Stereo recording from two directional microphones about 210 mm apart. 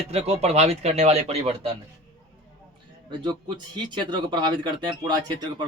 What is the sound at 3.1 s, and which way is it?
Speech, 20° right (ahead or behind).